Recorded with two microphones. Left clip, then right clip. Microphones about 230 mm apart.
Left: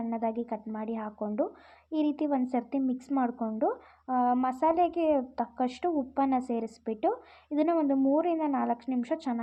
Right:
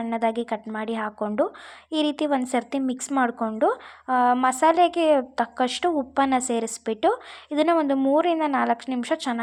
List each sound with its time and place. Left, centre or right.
0.0 s a woman's voice: centre